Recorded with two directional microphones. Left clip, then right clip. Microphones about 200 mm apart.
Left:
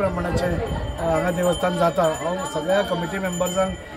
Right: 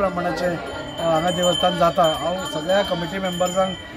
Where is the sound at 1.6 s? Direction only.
5° left (ahead or behind).